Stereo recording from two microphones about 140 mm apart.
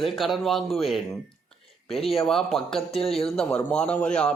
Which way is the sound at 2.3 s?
Centre (ahead or behind).